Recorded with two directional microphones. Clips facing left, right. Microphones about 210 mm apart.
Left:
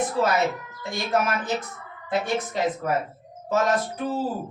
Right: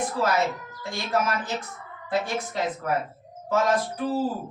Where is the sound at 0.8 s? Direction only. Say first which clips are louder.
Left 2 dB; 20° left (ahead or behind).